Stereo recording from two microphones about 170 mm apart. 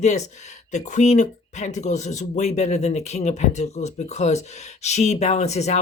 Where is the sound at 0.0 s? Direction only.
40° left (ahead or behind).